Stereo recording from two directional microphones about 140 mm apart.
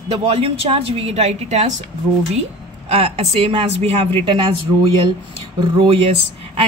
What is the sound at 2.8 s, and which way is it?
A woman's voice, 45° right (ahead or behind).